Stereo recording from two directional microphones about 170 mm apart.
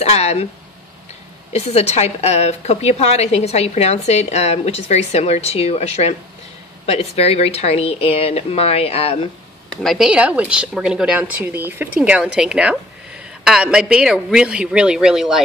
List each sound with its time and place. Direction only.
0.0 s speech: 40° left (ahead or behind)
1.5 s a woman's voice: 40° left (ahead or behind)
9.7 s speech: centre (ahead or behind)